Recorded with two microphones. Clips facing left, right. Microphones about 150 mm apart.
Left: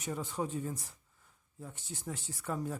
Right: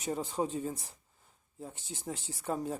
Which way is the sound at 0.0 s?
30° right (ahead or behind).